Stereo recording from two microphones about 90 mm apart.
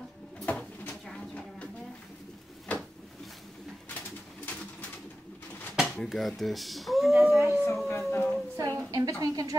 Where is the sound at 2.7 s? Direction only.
15° left (ahead or behind).